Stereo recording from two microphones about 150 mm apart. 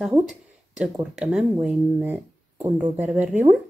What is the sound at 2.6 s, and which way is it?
Speech, 25° right (ahead or behind).